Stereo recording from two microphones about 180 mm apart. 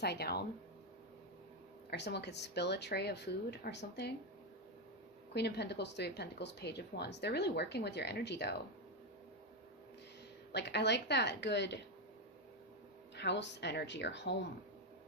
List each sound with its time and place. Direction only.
0.0 s speech: 65° left (ahead or behind)
1.9 s speech: 65° left (ahead or behind)
5.3 s speech: 70° left (ahead or behind)
10.5 s speech: 70° left (ahead or behind)
13.1 s speech: 75° left (ahead or behind)